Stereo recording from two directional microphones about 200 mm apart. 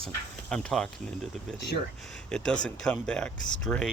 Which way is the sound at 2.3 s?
5° left (ahead or behind).